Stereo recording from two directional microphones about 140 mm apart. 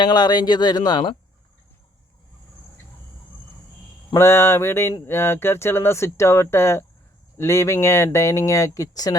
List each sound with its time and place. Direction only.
0.0 s speech: 30° left (ahead or behind)
4.1 s speech: 20° left (ahead or behind)